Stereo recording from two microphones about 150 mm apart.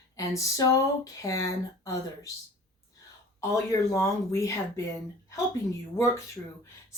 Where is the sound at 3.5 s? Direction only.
20° left (ahead or behind).